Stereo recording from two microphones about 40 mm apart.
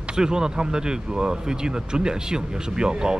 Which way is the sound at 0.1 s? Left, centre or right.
Centre.